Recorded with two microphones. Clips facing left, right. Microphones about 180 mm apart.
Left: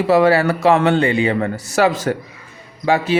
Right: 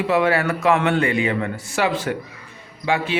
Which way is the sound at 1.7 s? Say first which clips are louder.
Left 5 dB; 40° left (ahead or behind).